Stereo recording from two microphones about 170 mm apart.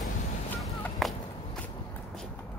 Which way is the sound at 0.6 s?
Centre (ahead or behind).